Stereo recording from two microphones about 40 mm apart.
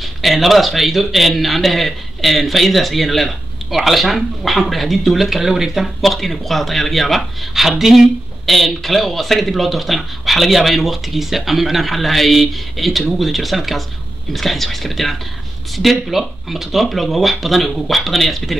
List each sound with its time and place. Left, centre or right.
0.0 s a man's voice: centre